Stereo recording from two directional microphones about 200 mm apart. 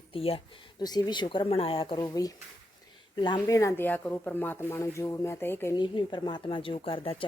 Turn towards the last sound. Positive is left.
turn(degrees=30)  # may be behind; listen again after turning